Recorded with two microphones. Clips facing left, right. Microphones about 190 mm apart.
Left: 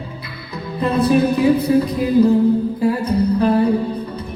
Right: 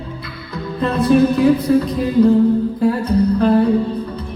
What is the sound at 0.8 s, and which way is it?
Music, 5° left (ahead or behind).